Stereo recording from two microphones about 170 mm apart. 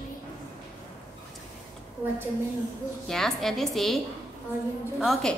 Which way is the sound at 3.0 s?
Centre (ahead or behind).